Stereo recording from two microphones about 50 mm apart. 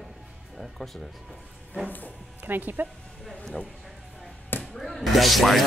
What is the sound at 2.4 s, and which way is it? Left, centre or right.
Speech, right.